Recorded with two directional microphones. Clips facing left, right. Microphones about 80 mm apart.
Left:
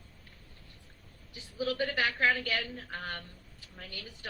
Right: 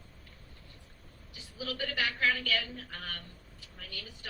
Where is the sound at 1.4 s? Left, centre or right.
Left.